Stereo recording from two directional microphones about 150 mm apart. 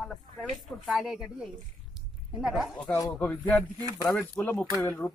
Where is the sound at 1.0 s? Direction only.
Centre (ahead or behind).